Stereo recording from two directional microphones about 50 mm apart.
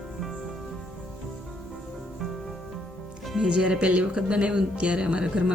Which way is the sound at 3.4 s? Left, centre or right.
Centre.